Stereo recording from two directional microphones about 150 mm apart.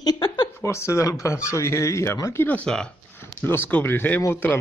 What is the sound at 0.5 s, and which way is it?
A woman's voice, 20° left (ahead or behind).